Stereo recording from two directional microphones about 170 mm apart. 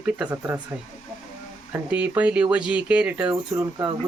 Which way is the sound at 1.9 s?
10° right (ahead or behind).